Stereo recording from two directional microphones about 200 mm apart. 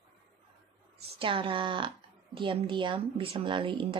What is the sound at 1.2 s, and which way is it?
Speech, 25° right (ahead or behind).